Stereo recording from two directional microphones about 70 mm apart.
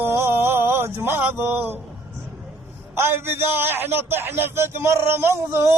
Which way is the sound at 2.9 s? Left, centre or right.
Right.